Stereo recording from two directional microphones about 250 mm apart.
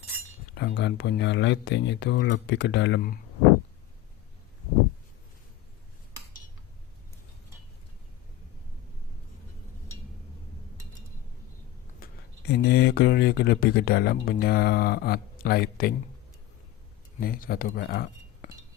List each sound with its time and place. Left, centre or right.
0.5 s speech: left
11.9 s speech: left
17.2 s speech: left